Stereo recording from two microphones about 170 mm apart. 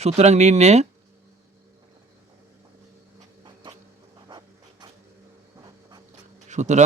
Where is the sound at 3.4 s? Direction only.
30° right (ahead or behind).